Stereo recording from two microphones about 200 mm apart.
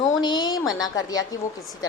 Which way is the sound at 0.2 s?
20° left (ahead or behind).